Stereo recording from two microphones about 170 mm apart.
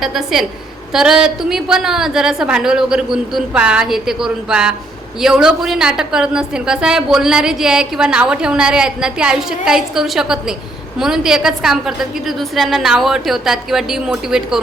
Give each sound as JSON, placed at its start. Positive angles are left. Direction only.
{"t": 0.0, "sound": "a woman's voice", "side_deg": 0}